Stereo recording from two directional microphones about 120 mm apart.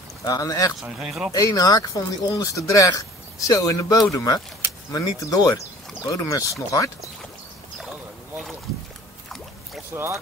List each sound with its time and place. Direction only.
0.2 s speech: 30° left (ahead or behind)
0.8 s speech: 5° right (ahead or behind)
1.3 s speech: 30° left (ahead or behind)
9.9 s speech: 15° right (ahead or behind)